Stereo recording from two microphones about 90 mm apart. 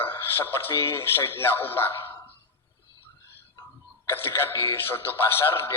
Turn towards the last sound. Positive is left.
turn(degrees=25)  # may be behind; listen again after turning